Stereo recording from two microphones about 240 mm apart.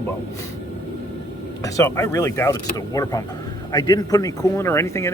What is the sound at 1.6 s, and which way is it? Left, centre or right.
Speech, centre.